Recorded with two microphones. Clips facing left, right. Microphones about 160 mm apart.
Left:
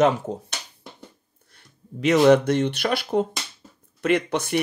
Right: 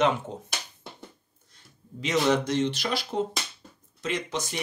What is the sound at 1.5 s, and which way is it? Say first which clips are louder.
Speech: left 5 dB; 60° left (ahead or behind).